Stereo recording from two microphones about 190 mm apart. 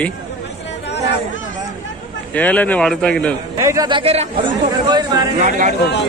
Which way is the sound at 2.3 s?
10° left (ahead or behind).